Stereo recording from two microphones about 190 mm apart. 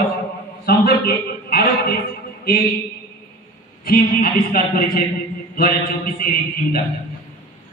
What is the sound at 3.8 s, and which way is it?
A man's voice, 50° left (ahead or behind).